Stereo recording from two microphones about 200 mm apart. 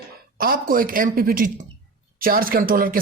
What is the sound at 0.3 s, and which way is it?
Speech, 45° right (ahead or behind).